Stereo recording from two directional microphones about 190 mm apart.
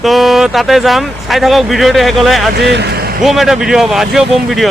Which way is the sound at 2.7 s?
60° right (ahead or behind).